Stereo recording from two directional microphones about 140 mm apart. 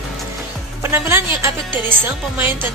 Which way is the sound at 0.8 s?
15° right (ahead or behind).